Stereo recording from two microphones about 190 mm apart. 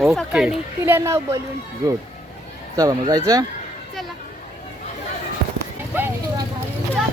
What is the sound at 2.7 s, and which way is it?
Speech, 20° right (ahead or behind).